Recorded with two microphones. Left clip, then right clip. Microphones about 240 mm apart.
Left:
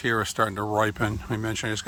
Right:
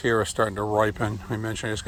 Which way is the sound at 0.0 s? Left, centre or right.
Centre.